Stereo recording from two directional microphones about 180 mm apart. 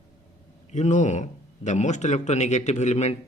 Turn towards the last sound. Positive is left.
turn(degrees=40)  # may be behind; listen again after turning